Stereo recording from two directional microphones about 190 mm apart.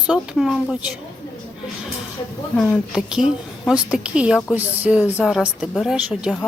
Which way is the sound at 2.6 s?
Centre (ahead or behind).